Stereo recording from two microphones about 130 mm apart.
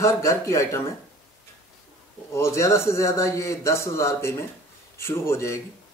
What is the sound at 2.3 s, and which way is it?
Speech, 20° left (ahead or behind).